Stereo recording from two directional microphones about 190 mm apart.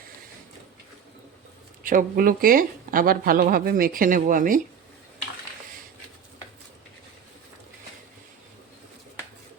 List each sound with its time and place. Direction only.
1.8 s speech: 45° right (ahead or behind)